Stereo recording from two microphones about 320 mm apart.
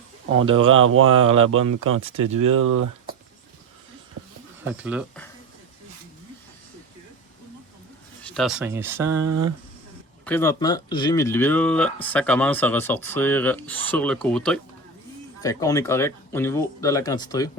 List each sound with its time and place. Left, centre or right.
0.6 s speech: right
1.6 s speech: right
2.0 s speech: centre
2.5 s speech: right
4.6 s speech: centre
8.2 s speech: centre
9.2 s speech: right
10.2 s speech: centre